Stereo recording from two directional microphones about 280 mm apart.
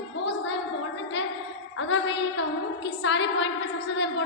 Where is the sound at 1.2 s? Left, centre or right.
Left.